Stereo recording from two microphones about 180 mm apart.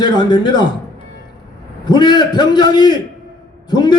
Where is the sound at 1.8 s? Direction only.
25° left (ahead or behind).